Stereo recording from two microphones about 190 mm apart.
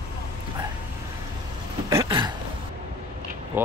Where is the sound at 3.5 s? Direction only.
10° right (ahead or behind).